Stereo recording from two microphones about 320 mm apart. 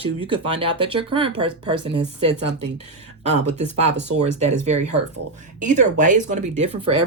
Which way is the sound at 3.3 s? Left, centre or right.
Right.